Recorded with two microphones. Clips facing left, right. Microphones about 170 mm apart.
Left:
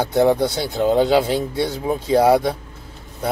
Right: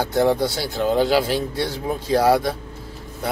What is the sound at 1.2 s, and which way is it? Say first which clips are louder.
Speech: left 2 dB; 25° left (ahead or behind).